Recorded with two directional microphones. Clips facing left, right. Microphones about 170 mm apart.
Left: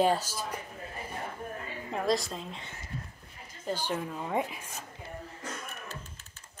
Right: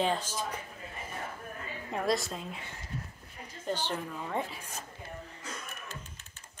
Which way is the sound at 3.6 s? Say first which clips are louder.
Left 1 dB; 10° left (ahead or behind).